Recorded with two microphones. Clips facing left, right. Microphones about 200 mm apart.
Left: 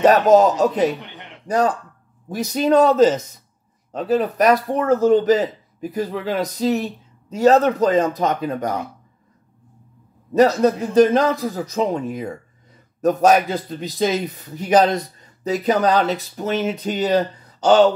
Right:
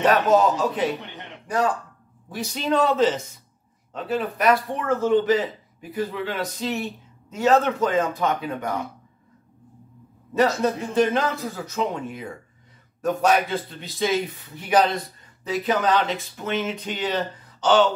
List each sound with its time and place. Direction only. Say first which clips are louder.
0.0 s speech: left 5 dB; 40° left (ahead or behind)
10.3 s speech: left 6 dB; 40° left (ahead or behind)